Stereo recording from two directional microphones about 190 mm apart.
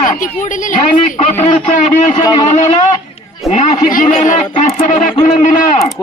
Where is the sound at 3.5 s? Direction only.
35° left (ahead or behind).